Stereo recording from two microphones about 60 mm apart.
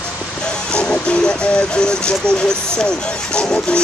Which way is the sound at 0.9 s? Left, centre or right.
Centre.